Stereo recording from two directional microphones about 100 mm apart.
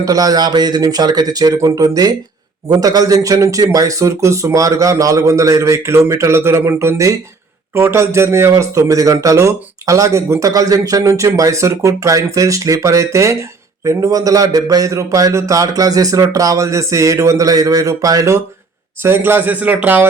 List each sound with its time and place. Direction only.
0.0 s speech: 40° right (ahead or behind)
19.0 s speech: 25° right (ahead or behind)